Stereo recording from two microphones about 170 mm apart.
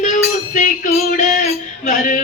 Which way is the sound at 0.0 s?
45° left (ahead or behind).